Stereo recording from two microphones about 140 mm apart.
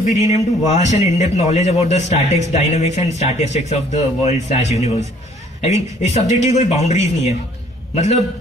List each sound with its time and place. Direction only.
0.0 s a man's voice: 50° left (ahead or behind)